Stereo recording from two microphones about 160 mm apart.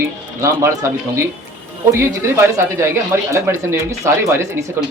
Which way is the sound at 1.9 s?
15° right (ahead or behind).